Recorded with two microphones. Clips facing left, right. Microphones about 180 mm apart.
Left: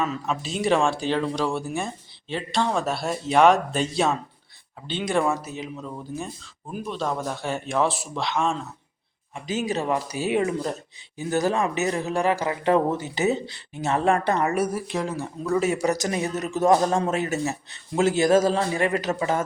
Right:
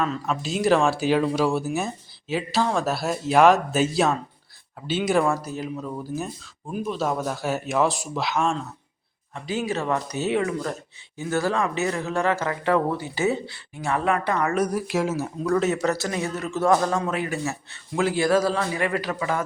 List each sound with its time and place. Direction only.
0.0 s speech: 5° left (ahead or behind)
9.3 s a man's voice: 20° left (ahead or behind)
14.5 s speech: 5° left (ahead or behind)
15.5 s a man's voice: 10° left (ahead or behind); by 19.5 s 25° left (ahead or behind)